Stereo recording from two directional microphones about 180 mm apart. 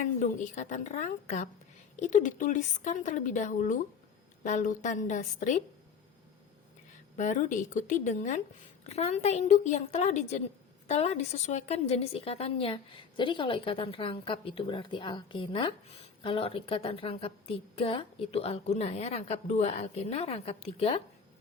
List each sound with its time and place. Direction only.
0.0 s a woman's voice: 40° left (ahead or behind)
7.2 s a woman's voice: 45° left (ahead or behind)